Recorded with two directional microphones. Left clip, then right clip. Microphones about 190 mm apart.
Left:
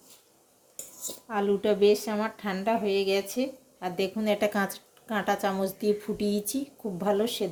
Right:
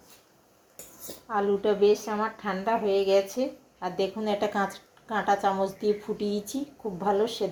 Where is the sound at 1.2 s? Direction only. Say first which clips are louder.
Right 1 dB; 35° left (ahead or behind).